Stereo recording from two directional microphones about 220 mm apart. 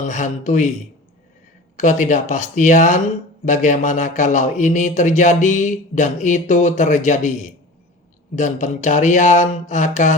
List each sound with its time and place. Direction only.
0.0 s a man's voice: 35° left (ahead or behind)
1.7 s a man's voice: 35° left (ahead or behind)